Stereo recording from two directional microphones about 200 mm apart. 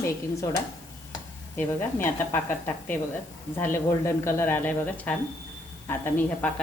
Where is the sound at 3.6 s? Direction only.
10° left (ahead or behind).